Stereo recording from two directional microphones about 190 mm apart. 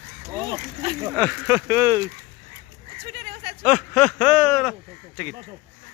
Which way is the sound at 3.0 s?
55° right (ahead or behind).